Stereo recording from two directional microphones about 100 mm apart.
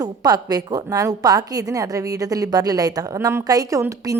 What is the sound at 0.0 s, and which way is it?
A woman's voice, 40° right (ahead or behind).